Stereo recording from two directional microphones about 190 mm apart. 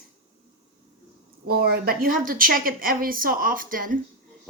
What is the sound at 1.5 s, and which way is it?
Speech, 55° right (ahead or behind).